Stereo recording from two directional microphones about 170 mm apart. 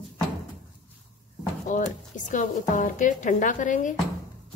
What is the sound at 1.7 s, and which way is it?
Speech, 50° left (ahead or behind).